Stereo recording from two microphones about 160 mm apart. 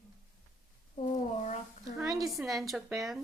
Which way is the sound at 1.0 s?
45° left (ahead or behind).